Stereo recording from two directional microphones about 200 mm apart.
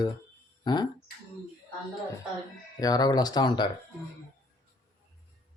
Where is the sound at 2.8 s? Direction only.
20° left (ahead or behind).